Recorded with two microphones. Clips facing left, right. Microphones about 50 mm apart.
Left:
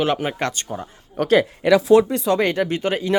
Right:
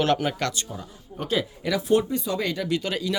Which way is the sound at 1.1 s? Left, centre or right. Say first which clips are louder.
Left 10 dB; left.